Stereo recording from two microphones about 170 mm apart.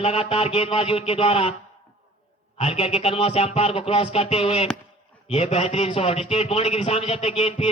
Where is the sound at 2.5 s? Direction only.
35° left (ahead or behind).